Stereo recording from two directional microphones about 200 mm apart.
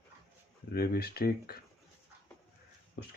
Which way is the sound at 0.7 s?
50° left (ahead or behind).